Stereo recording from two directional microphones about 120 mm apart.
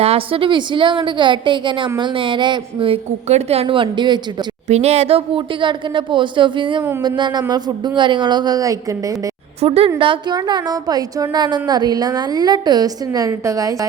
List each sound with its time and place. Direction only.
0.0 s a woman's voice: 50° right (ahead or behind)
4.7 s a woman's voice: 60° right (ahead or behind); by 9.1 s 30° right (ahead or behind)
9.6 s a woman's voice: 55° right (ahead or behind)
10.0 s a woman's voice: 40° right (ahead or behind)